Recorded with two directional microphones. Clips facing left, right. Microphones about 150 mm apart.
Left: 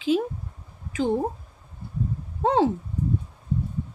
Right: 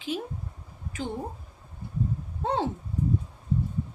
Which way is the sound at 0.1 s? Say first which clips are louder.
Left 10 dB; 90° left.